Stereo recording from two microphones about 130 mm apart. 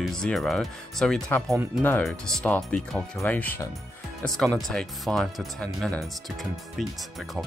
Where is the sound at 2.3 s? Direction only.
5° left (ahead or behind).